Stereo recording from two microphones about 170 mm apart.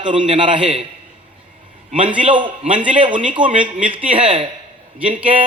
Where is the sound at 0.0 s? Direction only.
30° right (ahead or behind).